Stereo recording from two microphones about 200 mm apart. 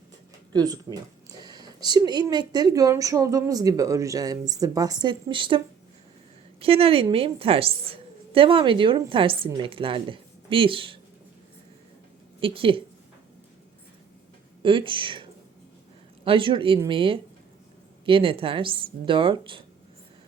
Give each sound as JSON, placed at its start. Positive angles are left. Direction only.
{"t": 0.5, "sound": "speech", "side_deg": -20}
{"t": 12.4, "sound": "speech", "side_deg": -25}
{"t": 14.6, "sound": "speech", "side_deg": -25}